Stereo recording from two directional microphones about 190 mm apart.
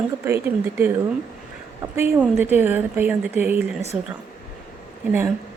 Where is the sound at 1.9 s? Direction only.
10° right (ahead or behind).